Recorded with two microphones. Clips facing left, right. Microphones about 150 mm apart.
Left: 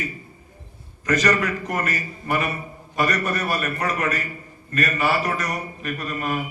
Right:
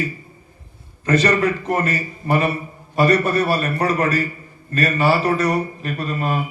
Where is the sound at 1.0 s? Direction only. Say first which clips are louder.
Right 4 dB; 30° right (ahead or behind).